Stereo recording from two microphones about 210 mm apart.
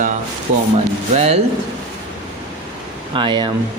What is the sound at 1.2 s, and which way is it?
Speech, 30° right (ahead or behind).